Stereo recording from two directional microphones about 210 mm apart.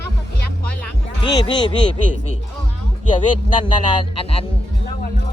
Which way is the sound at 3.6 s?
25° left (ahead or behind).